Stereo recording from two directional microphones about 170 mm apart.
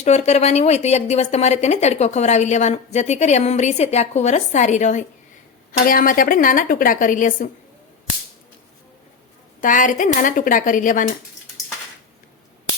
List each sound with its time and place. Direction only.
0.0 s speech: 40° left (ahead or behind)
9.6 s speech: 50° left (ahead or behind)